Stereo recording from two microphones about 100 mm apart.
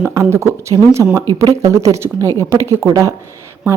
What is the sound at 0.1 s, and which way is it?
A woman's voice, 30° right (ahead or behind).